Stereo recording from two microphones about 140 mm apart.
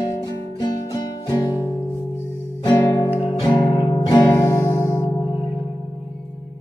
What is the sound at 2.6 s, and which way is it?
Music, 25° left (ahead or behind).